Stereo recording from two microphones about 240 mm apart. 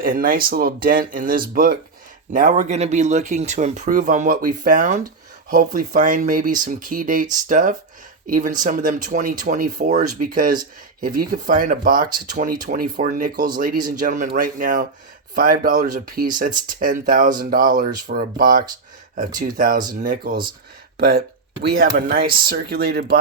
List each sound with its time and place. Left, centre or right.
0.0 s speech: right